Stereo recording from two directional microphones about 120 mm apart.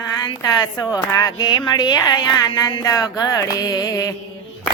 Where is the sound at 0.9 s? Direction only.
30° left (ahead or behind).